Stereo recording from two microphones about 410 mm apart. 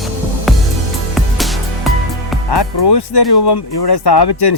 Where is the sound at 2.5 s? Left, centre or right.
Left.